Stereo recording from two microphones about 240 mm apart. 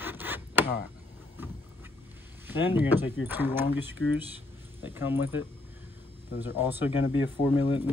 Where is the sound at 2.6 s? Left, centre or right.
Centre.